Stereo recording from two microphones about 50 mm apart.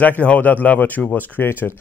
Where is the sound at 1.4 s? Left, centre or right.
Left.